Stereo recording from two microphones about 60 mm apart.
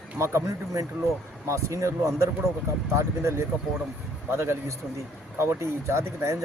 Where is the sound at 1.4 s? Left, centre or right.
Right.